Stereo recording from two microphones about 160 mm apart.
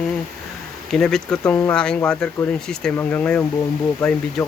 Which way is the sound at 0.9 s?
5° left (ahead or behind).